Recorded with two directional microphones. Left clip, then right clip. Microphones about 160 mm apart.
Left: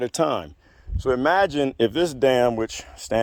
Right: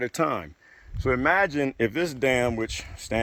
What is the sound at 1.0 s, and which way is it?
Speech, 85° left.